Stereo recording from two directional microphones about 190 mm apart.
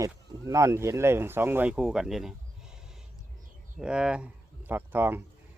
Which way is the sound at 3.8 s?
5° right (ahead or behind).